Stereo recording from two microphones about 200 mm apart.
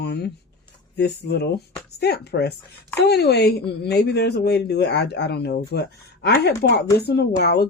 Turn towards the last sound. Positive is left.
turn(degrees=55)  # may be behind; listen again after turning